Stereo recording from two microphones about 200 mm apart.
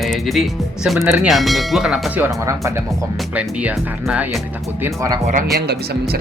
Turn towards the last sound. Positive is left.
turn(degrees=-55)  # may be behind; listen again after turning